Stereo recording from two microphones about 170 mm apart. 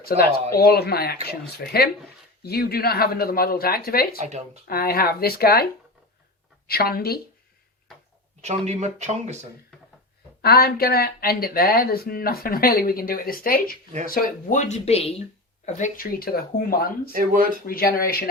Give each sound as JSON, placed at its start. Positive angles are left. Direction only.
{"t": 0.0, "sound": "speech", "side_deg": 65}
{"t": 4.2, "sound": "speech", "side_deg": -45}
{"t": 4.7, "sound": "speech", "side_deg": 65}
{"t": 6.7, "sound": "speech", "side_deg": 65}
{"t": 8.4, "sound": "speech", "side_deg": -40}
{"t": 10.4, "sound": "speech", "side_deg": 65}
{"t": 14.1, "sound": "speech", "side_deg": 45}
{"t": 15.6, "sound": "speech", "side_deg": 50}
{"t": 17.1, "sound": "speech", "side_deg": -55}
{"t": 17.7, "sound": "speech", "side_deg": 60}